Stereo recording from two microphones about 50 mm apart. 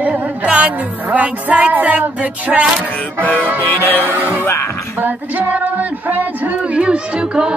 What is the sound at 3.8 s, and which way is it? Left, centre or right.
Music, left.